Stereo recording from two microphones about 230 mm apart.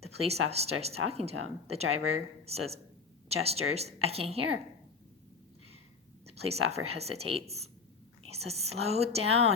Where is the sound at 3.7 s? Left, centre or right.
Right.